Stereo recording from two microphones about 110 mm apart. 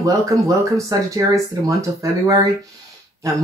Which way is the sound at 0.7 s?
30° right (ahead or behind).